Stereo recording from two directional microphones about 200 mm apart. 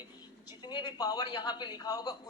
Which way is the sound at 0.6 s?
20° left (ahead or behind).